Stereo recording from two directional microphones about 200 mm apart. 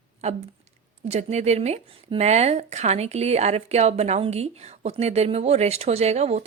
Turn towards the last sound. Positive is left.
turn(degrees=-35)  # may be behind; listen again after turning